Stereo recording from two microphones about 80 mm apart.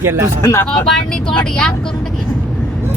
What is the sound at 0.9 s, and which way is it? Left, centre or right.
Speech, centre.